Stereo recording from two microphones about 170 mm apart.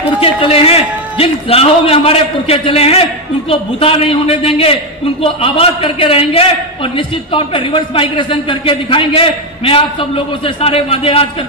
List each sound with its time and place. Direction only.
0.2 s a man's voice: 35° left (ahead or behind)